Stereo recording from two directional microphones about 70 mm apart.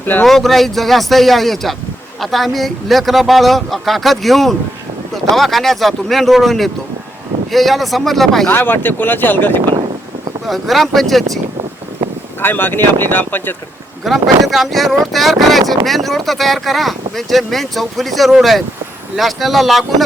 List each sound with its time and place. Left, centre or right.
0.0 s speech: left
0.3 s speech: centre
8.4 s speech: left
10.4 s speech: centre
12.4 s speech: left
14.0 s speech: centre